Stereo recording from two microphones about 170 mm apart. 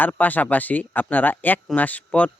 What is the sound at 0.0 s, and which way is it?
Speech, 10° left (ahead or behind).